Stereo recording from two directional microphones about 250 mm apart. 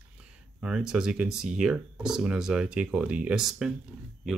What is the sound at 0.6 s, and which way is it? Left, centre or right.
Speech, centre.